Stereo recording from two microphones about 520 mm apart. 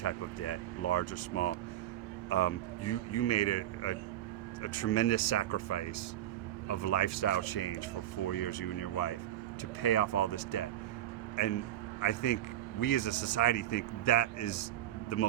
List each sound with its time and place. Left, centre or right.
0.0 s a man's voice: left